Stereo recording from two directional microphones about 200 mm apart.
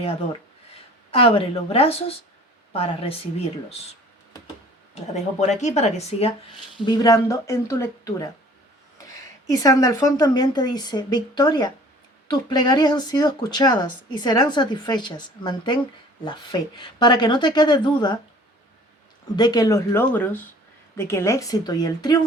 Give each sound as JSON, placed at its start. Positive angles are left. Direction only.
{"t": 1.1, "sound": "speech", "side_deg": 30}
{"t": 5.1, "sound": "speech", "side_deg": 35}
{"t": 6.8, "sound": "speech", "side_deg": 20}
{"t": 9.5, "sound": "speech", "side_deg": 15}
{"t": 19.4, "sound": "speech", "side_deg": 20}